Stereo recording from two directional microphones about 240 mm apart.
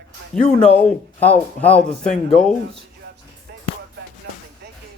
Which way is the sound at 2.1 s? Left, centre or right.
Left.